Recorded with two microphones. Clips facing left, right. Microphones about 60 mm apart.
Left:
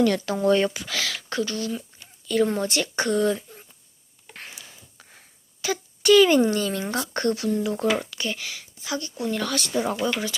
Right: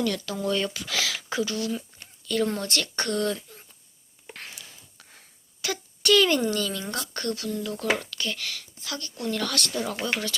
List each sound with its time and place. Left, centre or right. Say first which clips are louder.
0.0 s speech: left 7 dB; left
0.8 s speech: even; centre
4.4 s a sound: left 2 dB; centre
5.6 s a child's voice: left 5 dB; centre; by 6.7 s left
6.7 s speech: left 5 dB; left; by 9.8 s centre
9.8 s speech: left 5 dB; left